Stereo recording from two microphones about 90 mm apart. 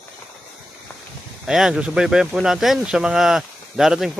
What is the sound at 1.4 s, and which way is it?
Speech, 5° right (ahead or behind).